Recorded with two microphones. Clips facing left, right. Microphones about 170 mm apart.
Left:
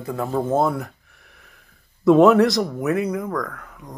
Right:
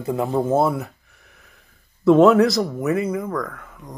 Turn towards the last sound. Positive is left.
turn(degrees=0)  # may be behind; listen again after turning